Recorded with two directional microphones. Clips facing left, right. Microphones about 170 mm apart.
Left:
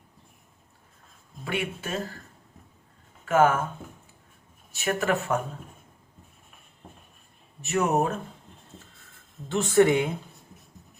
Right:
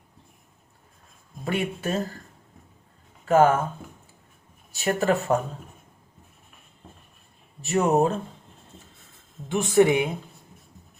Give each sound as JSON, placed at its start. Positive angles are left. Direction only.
{"t": 1.5, "sound": "speech", "side_deg": -40}
{"t": 3.2, "sound": "speech", "side_deg": -35}
{"t": 4.7, "sound": "speech", "side_deg": -35}
{"t": 7.6, "sound": "speech", "side_deg": -30}
{"t": 9.5, "sound": "speech", "side_deg": -15}